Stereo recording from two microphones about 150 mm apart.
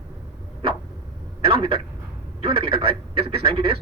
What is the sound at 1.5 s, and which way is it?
A man's voice, 40° right (ahead or behind).